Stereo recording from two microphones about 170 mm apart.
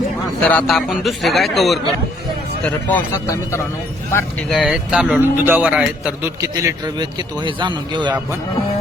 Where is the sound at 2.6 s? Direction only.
15° left (ahead or behind).